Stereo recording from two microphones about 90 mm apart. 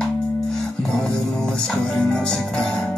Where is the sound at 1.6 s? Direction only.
10° left (ahead or behind).